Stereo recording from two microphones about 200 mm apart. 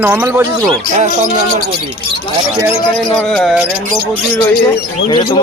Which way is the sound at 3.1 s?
Centre (ahead or behind).